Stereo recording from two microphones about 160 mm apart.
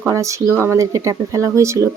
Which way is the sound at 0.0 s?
20° right (ahead or behind).